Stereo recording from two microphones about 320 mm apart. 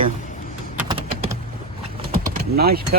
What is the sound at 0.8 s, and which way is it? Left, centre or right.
Typing, centre.